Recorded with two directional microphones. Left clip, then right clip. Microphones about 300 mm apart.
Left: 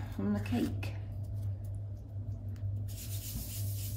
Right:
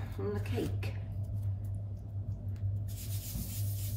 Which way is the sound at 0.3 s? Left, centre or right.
Centre.